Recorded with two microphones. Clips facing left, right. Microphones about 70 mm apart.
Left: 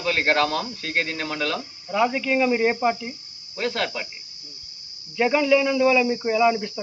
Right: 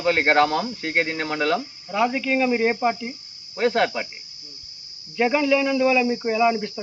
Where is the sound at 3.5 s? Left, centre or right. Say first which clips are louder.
Right 6 dB; right.